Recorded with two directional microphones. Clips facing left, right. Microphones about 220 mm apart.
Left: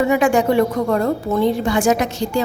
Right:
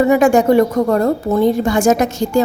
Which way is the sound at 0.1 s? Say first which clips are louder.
Right 4 dB; 40° right (ahead or behind).